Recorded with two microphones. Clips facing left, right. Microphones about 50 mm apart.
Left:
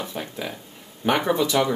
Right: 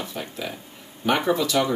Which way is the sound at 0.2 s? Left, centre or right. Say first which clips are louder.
Left 1 dB; centre.